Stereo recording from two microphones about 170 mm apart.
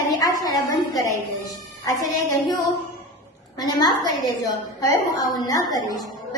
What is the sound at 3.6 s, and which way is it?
A woman's voice, 25° left (ahead or behind).